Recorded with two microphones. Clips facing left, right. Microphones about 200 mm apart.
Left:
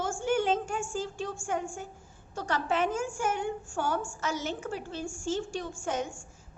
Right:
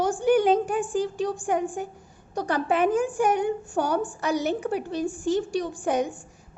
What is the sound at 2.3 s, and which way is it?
A woman's voice, 15° right (ahead or behind).